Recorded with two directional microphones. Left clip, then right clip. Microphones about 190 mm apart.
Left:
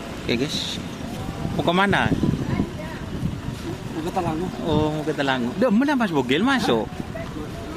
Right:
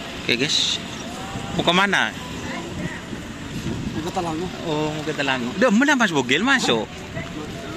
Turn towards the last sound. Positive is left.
turn(degrees=10)  # may be behind; listen again after turning